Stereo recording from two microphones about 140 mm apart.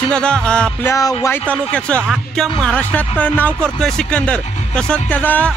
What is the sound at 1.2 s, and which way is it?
Speech, 10° left (ahead or behind).